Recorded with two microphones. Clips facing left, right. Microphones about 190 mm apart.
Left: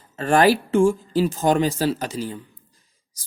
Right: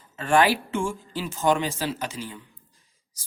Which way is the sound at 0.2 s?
40° left (ahead or behind).